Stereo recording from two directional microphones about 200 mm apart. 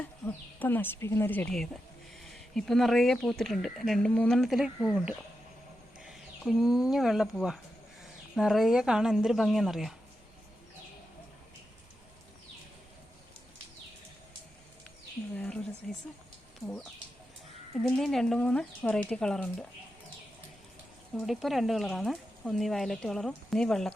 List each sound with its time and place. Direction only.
0.3 s speech: 10° left (ahead or behind)
15.4 s a sound: 5° left (ahead or behind)
15.9 s speech: 5° left (ahead or behind)
17.8 s speech: centre (ahead or behind)
21.2 s speech: centre (ahead or behind)